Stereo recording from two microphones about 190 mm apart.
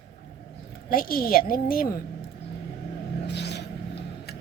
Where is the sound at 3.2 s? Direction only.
60° left (ahead or behind).